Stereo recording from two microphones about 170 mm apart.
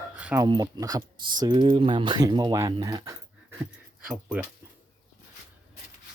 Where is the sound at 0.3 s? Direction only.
25° right (ahead or behind).